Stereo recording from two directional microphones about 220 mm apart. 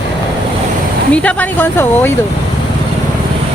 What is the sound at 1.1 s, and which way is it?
Speech, 5° left (ahead or behind).